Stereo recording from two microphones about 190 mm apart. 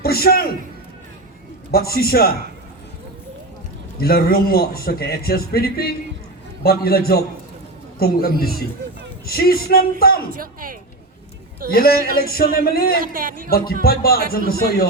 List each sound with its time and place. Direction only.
0.0 s a man's voice: 55° left (ahead or behind)
1.7 s a man's voice: 55° left (ahead or behind)
4.0 s a man's voice: 50° left (ahead or behind)
10.3 s speech: 45° right (ahead or behind)
11.7 s a man's voice: 50° left (ahead or behind)
13.0 s speech: 45° right (ahead or behind)
13.5 s a man's voice: 50° left (ahead or behind)